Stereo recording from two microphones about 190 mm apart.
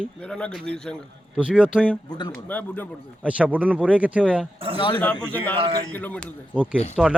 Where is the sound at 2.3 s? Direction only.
10° left (ahead or behind).